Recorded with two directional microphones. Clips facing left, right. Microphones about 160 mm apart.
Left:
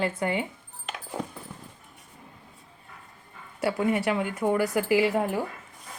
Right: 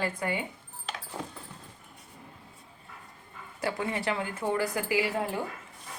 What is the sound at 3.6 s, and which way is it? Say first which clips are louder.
Speech: left 6 dB; 20° left (ahead or behind).